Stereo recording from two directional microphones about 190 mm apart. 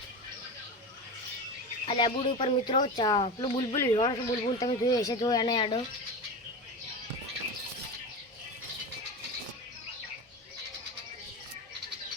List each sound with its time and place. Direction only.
1.9 s speech: 25° left (ahead or behind)